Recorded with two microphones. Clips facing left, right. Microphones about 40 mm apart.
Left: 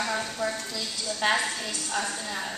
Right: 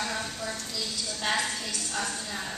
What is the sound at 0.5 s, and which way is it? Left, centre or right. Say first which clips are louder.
A woman's voice: left 2 dB; centre.